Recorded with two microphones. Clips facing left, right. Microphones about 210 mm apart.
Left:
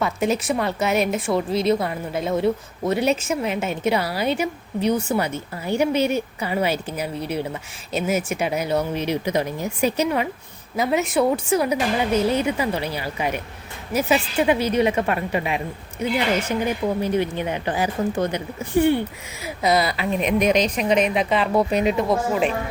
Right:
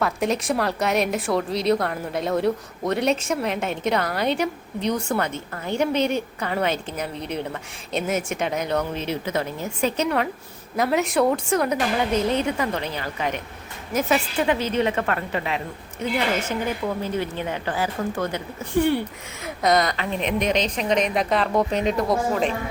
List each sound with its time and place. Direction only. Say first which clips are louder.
0.0 s a woman's voice: left 1 dB; centre (ahead or behind); by 18.4 s 15° left (ahead or behind)
18.8 s a woman's voice: left 2 dB; centre (ahead or behind)